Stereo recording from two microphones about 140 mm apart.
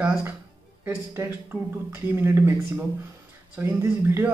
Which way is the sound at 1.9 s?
15° right (ahead or behind).